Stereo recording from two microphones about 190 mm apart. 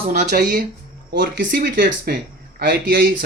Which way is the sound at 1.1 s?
60° right (ahead or behind).